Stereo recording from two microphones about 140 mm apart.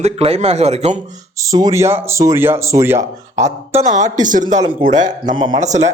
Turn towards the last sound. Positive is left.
turn(degrees=-30)  # may be behind; listen again after turning